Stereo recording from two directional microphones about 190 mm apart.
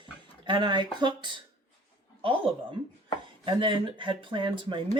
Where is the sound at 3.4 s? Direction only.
25° right (ahead or behind).